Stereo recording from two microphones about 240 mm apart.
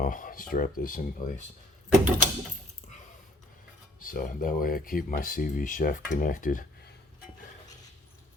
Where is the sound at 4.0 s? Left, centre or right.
Left.